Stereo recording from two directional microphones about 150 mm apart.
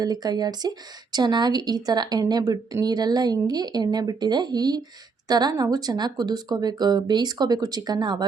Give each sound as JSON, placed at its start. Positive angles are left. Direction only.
{"t": 0.0, "sound": "speech", "side_deg": -25}